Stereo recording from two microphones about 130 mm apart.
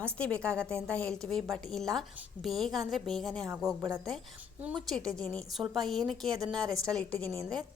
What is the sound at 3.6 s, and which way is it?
Speech, 30° right (ahead or behind).